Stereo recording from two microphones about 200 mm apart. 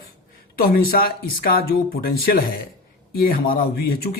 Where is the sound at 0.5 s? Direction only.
45° left (ahead or behind).